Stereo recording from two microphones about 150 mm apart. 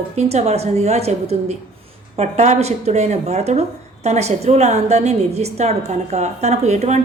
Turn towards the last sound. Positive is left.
turn(degrees=-50)  # may be behind; listen again after turning